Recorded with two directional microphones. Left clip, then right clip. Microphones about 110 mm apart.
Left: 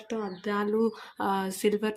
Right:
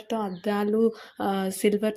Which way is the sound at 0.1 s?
35° right (ahead or behind).